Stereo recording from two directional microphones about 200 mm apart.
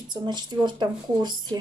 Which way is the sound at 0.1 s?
20° right (ahead or behind).